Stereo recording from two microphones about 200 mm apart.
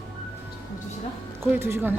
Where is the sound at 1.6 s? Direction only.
10° right (ahead or behind).